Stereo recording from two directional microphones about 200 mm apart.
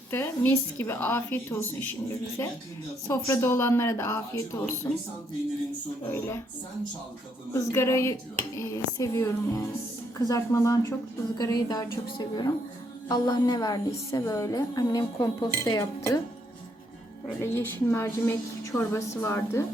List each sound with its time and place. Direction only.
0.1 s a woman's voice: 10° left (ahead or behind)
6.1 s a woman's voice: 10° left (ahead or behind)
7.5 s a woman's voice: 15° left (ahead or behind)
17.4 s a woman's voice: 15° left (ahead or behind)